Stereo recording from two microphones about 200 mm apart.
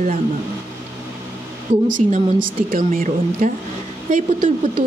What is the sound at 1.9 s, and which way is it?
A woman's voice, 40° right (ahead or behind).